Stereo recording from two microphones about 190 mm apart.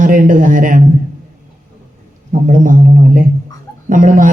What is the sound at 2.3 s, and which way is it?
A man's voice, 45° right (ahead or behind).